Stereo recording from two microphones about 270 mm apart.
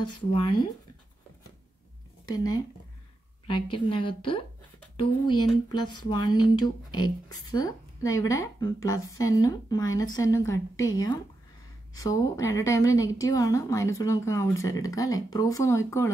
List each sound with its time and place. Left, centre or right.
0.0 s a woman's voice: centre
2.2 s a woman's voice: centre